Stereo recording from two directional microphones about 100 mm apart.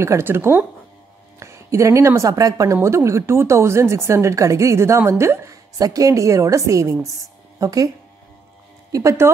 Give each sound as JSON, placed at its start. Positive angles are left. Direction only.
{"t": 0.0, "sound": "a woman's voice", "side_deg": -25}
{"t": 8.9, "sound": "a woman's voice", "side_deg": -30}